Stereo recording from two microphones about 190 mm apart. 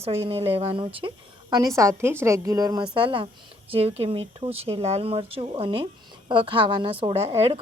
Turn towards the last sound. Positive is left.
turn(degrees=-30)  # may be behind; listen again after turning